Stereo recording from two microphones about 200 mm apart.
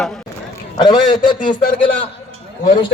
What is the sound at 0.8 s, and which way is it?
Speech, 20° left (ahead or behind).